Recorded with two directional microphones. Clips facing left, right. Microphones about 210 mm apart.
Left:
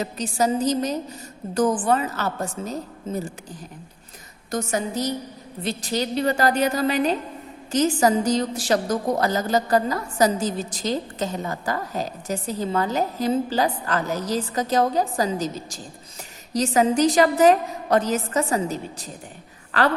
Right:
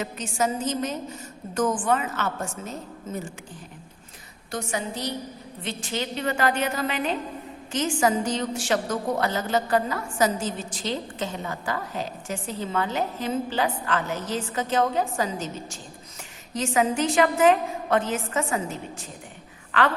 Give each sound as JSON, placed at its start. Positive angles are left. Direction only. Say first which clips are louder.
{"t": 0.0, "sound": "a woman's voice", "louder": "left 3 dB", "side_deg": 35}
{"t": 4.5, "sound": "a woman's voice", "louder": "left 5 dB", "side_deg": 45}